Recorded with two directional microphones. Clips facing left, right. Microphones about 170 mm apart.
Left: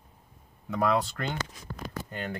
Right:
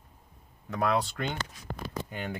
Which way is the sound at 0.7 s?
Centre (ahead or behind).